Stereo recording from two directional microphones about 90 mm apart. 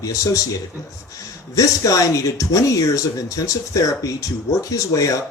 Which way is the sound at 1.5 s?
40° left (ahead or behind).